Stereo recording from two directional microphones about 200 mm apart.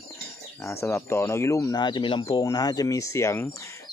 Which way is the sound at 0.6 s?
15° left (ahead or behind).